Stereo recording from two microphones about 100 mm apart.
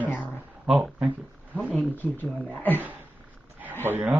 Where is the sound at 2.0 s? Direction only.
15° left (ahead or behind).